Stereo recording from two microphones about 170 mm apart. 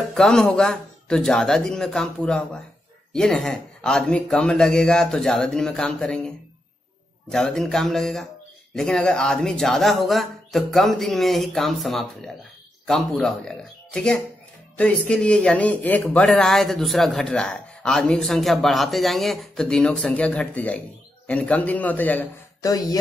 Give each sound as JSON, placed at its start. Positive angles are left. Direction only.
{"t": 0.1, "sound": "a man's voice", "side_deg": 5}
{"t": 22.6, "sound": "speech", "side_deg": 20}